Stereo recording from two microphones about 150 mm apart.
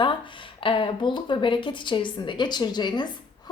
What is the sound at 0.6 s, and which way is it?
A woman's voice, 35° left (ahead or behind).